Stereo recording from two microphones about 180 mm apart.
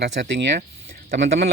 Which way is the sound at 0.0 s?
70° right (ahead or behind).